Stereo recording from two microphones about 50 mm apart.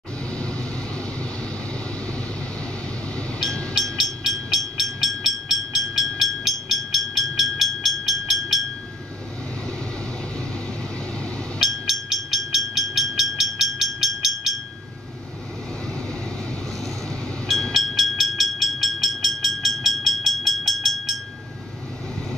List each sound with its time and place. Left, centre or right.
0.3 s vehicle: left
3.8 s vehicle: centre
11.6 s train: centre
17.5 s vehicle: centre